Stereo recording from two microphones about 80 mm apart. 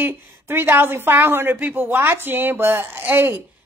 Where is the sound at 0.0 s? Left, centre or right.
Right.